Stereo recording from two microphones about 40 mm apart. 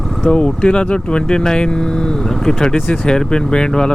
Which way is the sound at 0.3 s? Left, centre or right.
Left.